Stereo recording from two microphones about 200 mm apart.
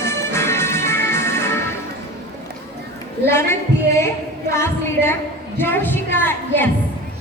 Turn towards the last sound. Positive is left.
turn(degrees=10)  # may be behind; listen again after turning